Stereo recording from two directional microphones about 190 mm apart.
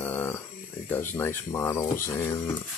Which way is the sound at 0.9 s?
10° left (ahead or behind).